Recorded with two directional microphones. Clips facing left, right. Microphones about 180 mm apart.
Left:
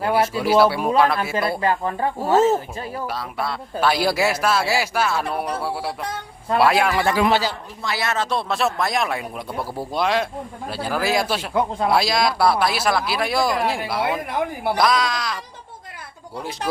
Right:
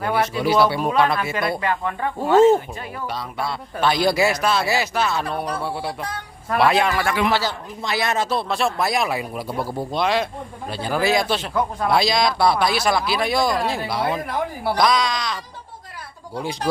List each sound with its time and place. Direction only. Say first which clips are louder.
0.1 s speech: left 1 dB; 5° left (ahead or behind)
1.2 s speech: left 2 dB; 30° left (ahead or behind)
2.3 s speech: right 4 dB; 5° left (ahead or behind)
7.3 s a man's voice: left 2 dB; 15° left (ahead or behind)
7.9 s speech: right 2 dB; 20° right (ahead or behind)
8.3 s speech: even; centre (ahead or behind)